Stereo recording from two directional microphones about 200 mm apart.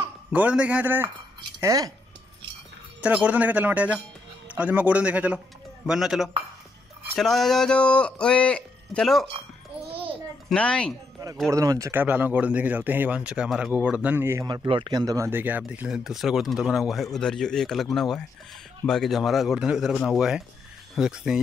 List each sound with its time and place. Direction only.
0.3 s speech: 5° right (ahead or behind)
3.0 s speech: 5° right (ahead or behind)
9.8 s a sound: 30° right (ahead or behind)
10.5 s speech: 5° left (ahead or behind)
11.5 s speech: 15° right (ahead or behind)